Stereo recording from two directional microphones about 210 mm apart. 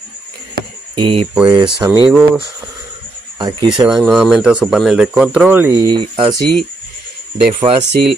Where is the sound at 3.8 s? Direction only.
Centre (ahead or behind).